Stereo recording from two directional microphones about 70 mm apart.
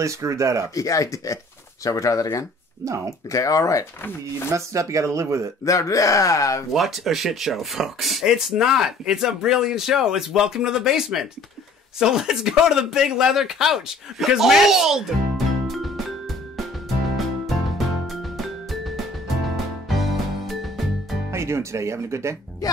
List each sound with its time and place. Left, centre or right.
0.0 s speech: right
0.7 s speech: left
2.8 s speech: right
3.3 s speech: left
4.5 s speech: right
5.7 s speech: left
6.7 s speech: centre
17.5 s music: centre
21.3 s speech: right